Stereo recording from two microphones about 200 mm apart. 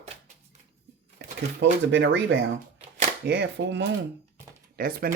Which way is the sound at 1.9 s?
65° right (ahead or behind).